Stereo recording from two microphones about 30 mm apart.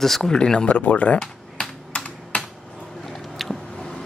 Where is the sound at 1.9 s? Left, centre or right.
Left.